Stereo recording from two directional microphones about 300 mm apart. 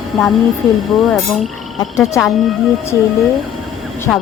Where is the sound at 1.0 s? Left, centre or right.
Centre.